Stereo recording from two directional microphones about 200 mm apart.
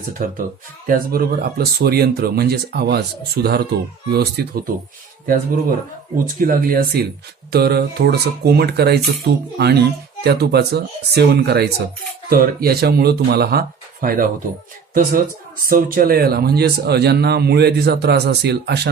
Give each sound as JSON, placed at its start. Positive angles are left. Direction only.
{"t": 0.2, "sound": "speech", "side_deg": -40}
{"t": 15.7, "sound": "a man's voice", "side_deg": -45}